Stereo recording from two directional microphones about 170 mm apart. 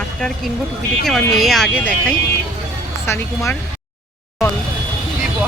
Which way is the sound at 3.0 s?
15° left (ahead or behind).